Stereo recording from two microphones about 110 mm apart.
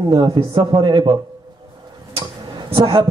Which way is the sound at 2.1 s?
55° right (ahead or behind).